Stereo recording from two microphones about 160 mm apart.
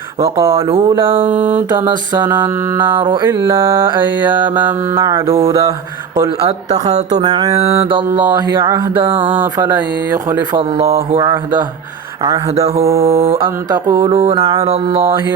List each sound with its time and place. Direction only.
0.2 s mantra: 15° right (ahead or behind)
0.5 s a sound: 35° right (ahead or behind)
1.1 s mantra: 10° right (ahead or behind)
3.0 s mantra: 30° right (ahead or behind)
3.2 s mantra: 15° right (ahead or behind)
6.2 s speech: 40° right (ahead or behind)
7.2 s mantra: 25° right (ahead or behind)
10.6 s a sound: 40° right (ahead or behind)
11.2 s mantra: 25° right (ahead or behind)
12.5 s a sound: 40° right (ahead or behind)
13.7 s mantra: 20° right (ahead or behind)